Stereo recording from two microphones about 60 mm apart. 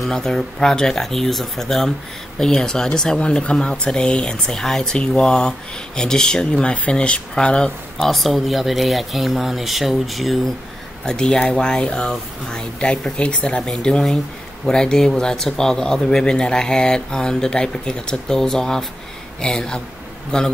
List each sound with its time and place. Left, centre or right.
0.0 s speech: centre
8.0 s speech: centre
11.1 s speech: centre